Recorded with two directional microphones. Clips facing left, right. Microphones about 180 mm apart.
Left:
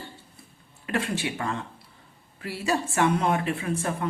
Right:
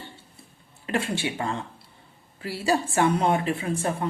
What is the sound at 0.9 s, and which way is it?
Speech, 30° right (ahead or behind).